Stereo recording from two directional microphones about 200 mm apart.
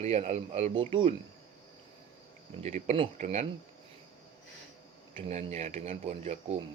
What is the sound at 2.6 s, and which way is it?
Speech, 35° right (ahead or behind).